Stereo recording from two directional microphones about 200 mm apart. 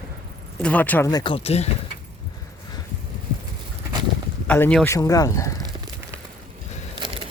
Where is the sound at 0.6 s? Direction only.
10° left (ahead or behind); by 1.6 s 30° left (ahead or behind).